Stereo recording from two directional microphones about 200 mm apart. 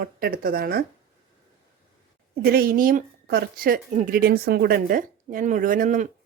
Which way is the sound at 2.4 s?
50° right (ahead or behind).